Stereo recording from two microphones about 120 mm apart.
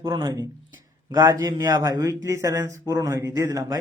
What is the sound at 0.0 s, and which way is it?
A man's voice, 35° right (ahead or behind).